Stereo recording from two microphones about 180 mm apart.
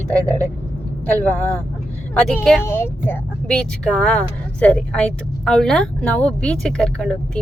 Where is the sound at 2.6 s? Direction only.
10° left (ahead or behind).